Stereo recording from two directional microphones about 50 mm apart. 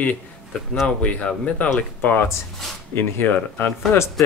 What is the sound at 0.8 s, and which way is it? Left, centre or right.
Speech, left.